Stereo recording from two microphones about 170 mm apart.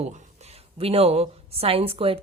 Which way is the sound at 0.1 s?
40° right (ahead or behind).